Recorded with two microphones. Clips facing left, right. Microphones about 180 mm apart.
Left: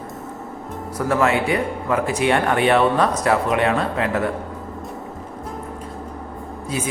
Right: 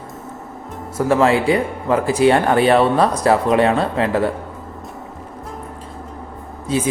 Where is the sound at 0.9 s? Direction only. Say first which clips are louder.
Right 4 dB; 25° right (ahead or behind).